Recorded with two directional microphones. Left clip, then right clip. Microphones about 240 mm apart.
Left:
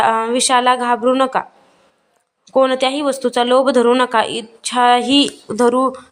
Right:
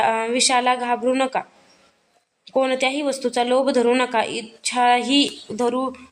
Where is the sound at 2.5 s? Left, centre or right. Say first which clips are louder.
Left 6 dB; centre.